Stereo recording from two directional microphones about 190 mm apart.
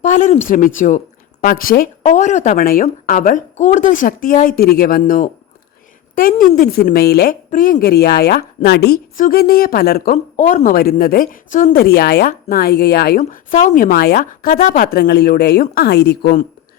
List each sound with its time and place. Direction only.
0.0 s a woman's voice: 40° left (ahead or behind)